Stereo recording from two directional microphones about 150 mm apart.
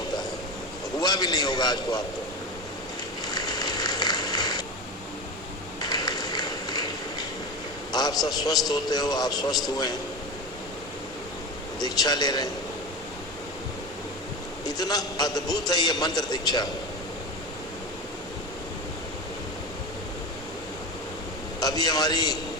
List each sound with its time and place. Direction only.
0.9 s a man's voice: 25° left (ahead or behind)
3.2 s a sound: 25° left (ahead or behind)
5.8 s a sound: 25° left (ahead or behind)
8.3 s a man's voice: 25° left (ahead or behind)
11.8 s a man's voice: 25° left (ahead or behind)
14.7 s a man's voice: 25° left (ahead or behind)
21.6 s a man's voice: 25° left (ahead or behind)